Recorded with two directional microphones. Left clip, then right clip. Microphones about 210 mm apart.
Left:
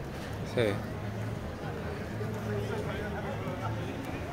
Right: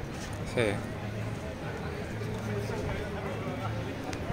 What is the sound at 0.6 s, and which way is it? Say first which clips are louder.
Speech: even; 5° left (ahead or behind).